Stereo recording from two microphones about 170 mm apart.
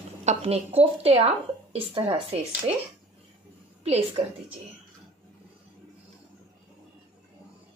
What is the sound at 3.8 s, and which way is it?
Speech, 35° right (ahead or behind).